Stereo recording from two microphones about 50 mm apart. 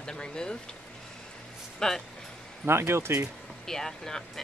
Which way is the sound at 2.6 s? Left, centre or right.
Right.